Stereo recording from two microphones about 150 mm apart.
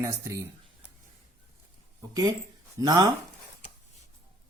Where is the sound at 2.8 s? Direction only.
25° right (ahead or behind).